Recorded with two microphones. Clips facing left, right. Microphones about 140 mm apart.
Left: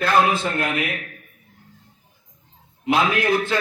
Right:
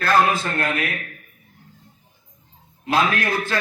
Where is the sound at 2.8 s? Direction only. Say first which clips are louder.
Left 2 dB; 15° left (ahead or behind).